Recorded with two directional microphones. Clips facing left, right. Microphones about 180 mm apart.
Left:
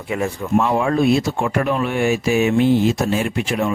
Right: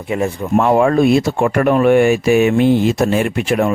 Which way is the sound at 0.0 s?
25° right (ahead or behind).